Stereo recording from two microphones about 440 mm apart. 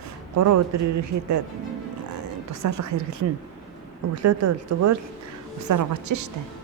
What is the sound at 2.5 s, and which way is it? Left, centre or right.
Speech, right.